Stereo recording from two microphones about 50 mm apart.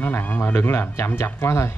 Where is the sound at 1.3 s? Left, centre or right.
Left.